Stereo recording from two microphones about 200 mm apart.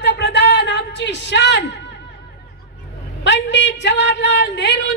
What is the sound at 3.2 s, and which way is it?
Speech, 65° left (ahead or behind).